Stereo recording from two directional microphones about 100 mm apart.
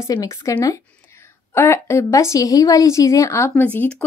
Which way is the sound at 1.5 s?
25° left (ahead or behind).